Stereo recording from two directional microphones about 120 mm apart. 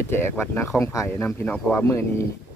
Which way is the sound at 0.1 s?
20° left (ahead or behind).